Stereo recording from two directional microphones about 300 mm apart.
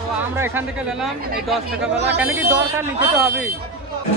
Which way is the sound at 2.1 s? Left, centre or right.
Centre.